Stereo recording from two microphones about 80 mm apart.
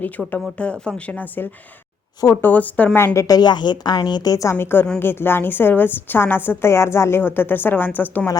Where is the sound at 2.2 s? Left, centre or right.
Left.